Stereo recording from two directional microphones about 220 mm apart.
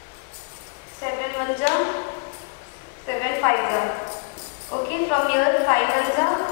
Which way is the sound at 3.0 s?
15° left (ahead or behind).